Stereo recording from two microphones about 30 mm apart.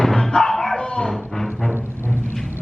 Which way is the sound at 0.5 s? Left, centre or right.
Centre.